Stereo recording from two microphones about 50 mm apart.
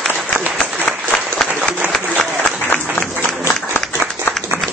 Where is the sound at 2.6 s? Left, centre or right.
Left.